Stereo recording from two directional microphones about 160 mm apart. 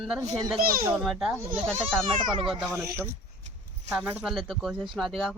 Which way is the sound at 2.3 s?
35° right (ahead or behind).